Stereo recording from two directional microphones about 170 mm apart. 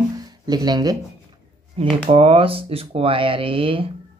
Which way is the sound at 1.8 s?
35° right (ahead or behind).